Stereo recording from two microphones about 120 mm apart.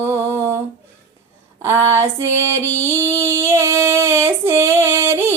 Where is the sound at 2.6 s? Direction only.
20° right (ahead or behind).